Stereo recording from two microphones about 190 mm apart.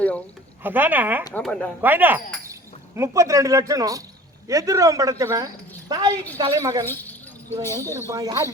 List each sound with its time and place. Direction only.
0.6 s speech: 10° right (ahead or behind)
1.3 s speech: 5° left (ahead or behind)
1.8 s a woman's voice: 10° right (ahead or behind)
6.8 s a sound: 10° left (ahead or behind)
7.8 s speech: 15° right (ahead or behind)